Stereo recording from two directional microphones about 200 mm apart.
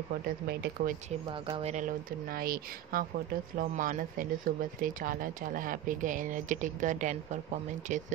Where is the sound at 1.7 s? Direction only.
45° right (ahead or behind).